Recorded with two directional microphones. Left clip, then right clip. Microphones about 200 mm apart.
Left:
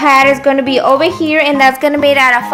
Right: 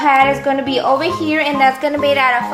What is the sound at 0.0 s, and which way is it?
A woman's voice, 50° left (ahead or behind).